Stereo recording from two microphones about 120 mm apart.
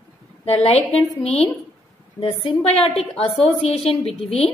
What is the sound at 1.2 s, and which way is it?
Speech, 60° left (ahead or behind).